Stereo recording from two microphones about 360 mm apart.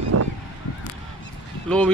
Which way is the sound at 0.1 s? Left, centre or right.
Right.